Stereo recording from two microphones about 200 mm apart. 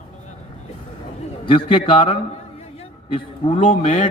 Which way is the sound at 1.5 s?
25° left (ahead or behind).